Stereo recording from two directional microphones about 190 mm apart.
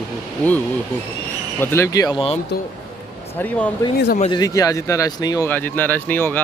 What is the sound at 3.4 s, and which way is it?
Speech, 5° left (ahead or behind).